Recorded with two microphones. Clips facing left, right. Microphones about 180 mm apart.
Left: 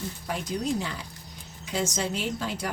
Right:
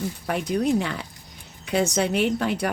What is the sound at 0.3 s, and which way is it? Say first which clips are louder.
Speech: right 7 dB; 65° right (ahead or behind).